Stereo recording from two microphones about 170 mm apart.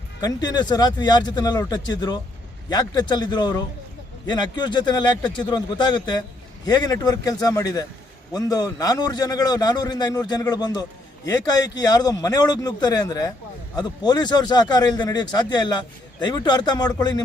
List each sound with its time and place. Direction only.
0.2 s a man's voice: 25° left (ahead or behind)